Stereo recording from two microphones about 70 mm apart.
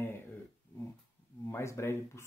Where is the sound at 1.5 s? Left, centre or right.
Left.